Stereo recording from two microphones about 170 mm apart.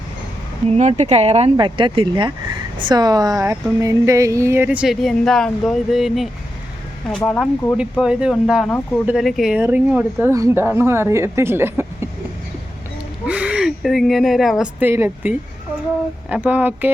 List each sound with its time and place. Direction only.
0.7 s speech: 40° right (ahead or behind)
1.5 s speech: 30° right (ahead or behind); by 6.2 s centre (ahead or behind)
7.3 s speech: centre (ahead or behind); by 12.0 s 15° right (ahead or behind)
13.2 s speech: 5° right (ahead or behind)
14.6 s speech: 10° right (ahead or behind)